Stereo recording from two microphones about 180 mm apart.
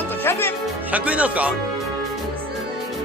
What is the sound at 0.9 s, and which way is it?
Speech, 10° right (ahead or behind).